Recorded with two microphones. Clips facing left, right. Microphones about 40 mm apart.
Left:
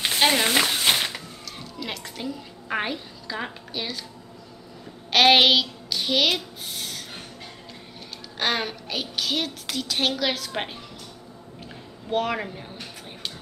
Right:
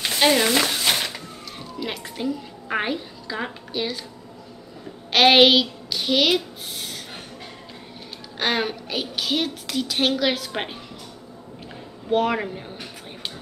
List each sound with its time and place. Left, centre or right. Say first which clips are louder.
0.0 s a sound: right 2 dB; centre
1.6 s a woman's voice: right 3 dB; centre
5.1 s a child's voice: right 2 dB; centre
8.4 s a woman's voice: right 2 dB; centre
12.1 s a woman's voice: right 4 dB; centre